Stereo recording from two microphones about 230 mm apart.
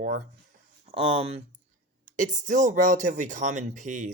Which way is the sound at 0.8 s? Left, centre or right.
Right.